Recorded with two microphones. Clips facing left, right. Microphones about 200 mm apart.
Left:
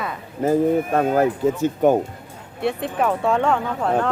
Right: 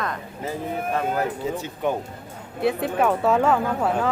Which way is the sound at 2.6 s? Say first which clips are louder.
Right 1 dB; centre (ahead or behind).